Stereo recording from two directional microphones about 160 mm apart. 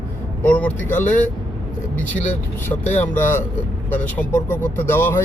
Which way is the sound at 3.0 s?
15° left (ahead or behind).